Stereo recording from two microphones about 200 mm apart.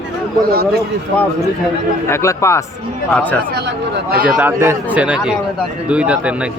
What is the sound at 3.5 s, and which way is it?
Speech, 60° right (ahead or behind).